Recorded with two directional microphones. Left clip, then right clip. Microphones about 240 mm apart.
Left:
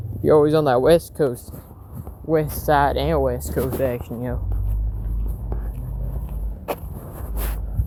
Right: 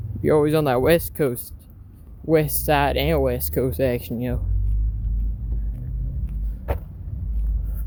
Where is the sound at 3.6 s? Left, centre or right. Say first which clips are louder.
Right 1 dB; right.